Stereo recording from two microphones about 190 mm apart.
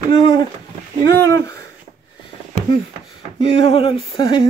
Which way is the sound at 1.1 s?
15° left (ahead or behind).